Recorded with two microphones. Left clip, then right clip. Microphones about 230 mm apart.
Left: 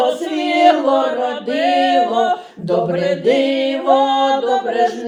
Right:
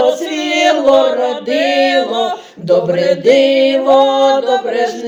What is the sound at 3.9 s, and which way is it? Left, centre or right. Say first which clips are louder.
Chant: right 2 dB; right.